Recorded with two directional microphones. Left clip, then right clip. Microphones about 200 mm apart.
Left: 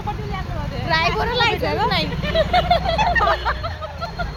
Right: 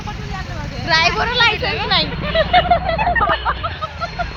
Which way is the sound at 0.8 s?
10° right (ahead or behind).